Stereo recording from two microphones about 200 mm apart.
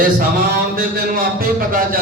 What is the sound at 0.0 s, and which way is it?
A man's voice, 45° right (ahead or behind).